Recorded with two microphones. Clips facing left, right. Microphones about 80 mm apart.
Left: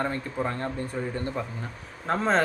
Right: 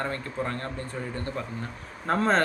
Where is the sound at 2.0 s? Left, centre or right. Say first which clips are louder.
Right 1 dB; centre.